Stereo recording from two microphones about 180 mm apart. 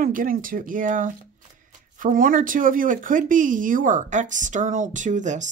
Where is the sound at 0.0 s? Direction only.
50° right (ahead or behind).